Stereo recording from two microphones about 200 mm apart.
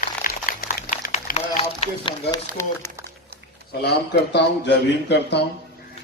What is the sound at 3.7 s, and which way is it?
Speech, 55° left (ahead or behind).